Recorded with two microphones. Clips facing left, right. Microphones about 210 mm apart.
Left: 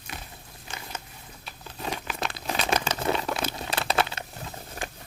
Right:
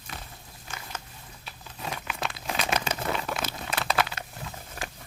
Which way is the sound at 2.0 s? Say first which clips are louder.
Left 2 dB; 35° left (ahead or behind).